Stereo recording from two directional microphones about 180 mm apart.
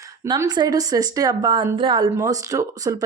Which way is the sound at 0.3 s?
25° right (ahead or behind).